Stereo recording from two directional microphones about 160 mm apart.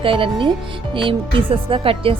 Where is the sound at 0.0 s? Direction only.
35° right (ahead or behind).